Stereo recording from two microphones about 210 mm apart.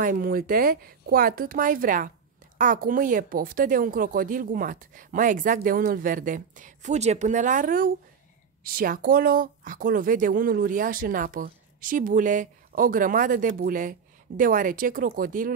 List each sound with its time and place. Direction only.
0.0 s speech: 40° right (ahead or behind)